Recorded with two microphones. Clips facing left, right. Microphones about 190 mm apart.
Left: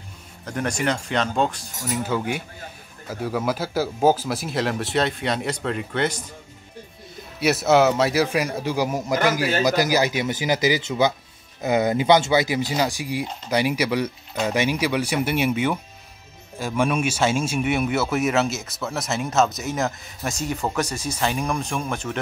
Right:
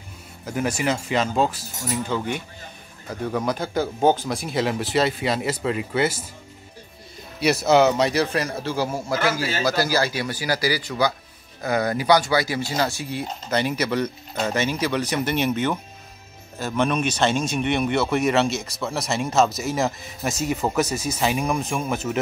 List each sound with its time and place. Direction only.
0.5 s speech: 5° right (ahead or behind)
7.3 s speech: centre (ahead or behind)